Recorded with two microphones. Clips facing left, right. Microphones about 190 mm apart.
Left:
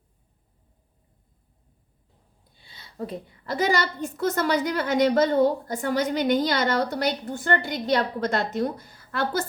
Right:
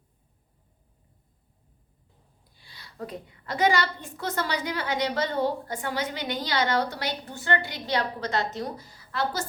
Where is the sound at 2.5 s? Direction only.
25° left (ahead or behind).